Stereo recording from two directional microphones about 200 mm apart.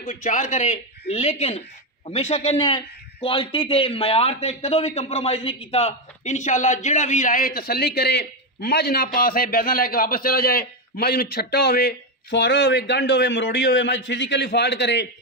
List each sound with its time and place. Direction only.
0.0 s a man's voice: 40° left (ahead or behind); by 15.0 s 60° left (ahead or behind)